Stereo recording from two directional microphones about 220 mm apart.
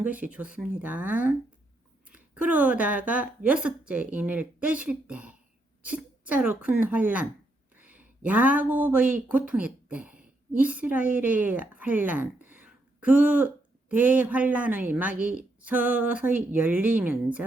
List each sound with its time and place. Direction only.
0.0 s a woman's voice: 5° right (ahead or behind)